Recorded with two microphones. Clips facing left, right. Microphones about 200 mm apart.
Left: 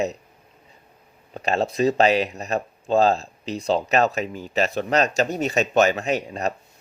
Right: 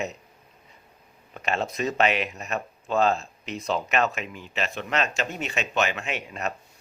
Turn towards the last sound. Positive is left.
turn(degrees=35)  # may be behind; listen again after turning